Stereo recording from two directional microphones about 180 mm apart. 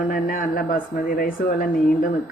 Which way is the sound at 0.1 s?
50° left (ahead or behind).